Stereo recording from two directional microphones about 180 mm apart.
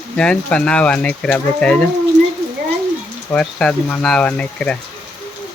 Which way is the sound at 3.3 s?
5° left (ahead or behind).